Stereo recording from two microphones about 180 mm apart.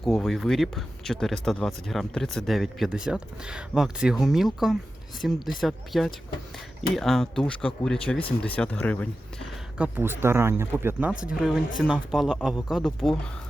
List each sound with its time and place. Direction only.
0.0 s speech: centre (ahead or behind)
9.7 s speech: 10° right (ahead or behind)